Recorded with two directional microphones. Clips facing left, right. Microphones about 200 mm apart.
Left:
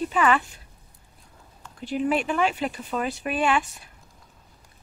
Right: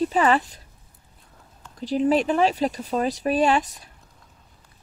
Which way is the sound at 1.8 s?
35° right (ahead or behind).